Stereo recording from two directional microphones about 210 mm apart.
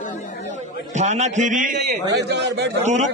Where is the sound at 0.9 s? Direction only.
35° right (ahead or behind); by 2.8 s 55° right (ahead or behind).